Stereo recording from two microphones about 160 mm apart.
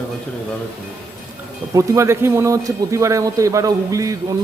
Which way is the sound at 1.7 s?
20° right (ahead or behind).